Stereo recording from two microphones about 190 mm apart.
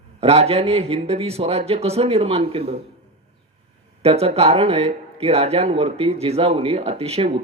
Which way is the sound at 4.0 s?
30° right (ahead or behind).